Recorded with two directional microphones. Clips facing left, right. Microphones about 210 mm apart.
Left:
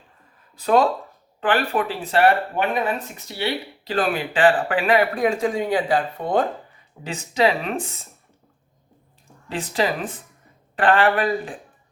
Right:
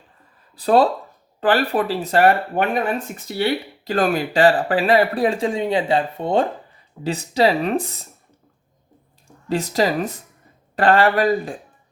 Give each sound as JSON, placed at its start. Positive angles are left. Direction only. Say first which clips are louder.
{"t": 0.5, "sound": "speech", "louder": "right 2 dB", "side_deg": -35}
{"t": 9.5, "sound": "speech", "louder": "right 4 dB", "side_deg": -40}